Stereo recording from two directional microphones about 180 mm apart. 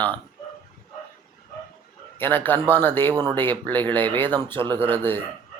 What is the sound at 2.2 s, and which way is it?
Speech, 10° left (ahead or behind).